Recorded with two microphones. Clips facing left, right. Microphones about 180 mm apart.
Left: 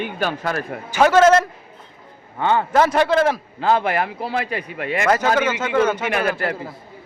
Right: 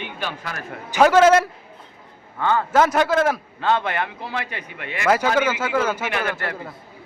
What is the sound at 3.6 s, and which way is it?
Speech, 30° left (ahead or behind).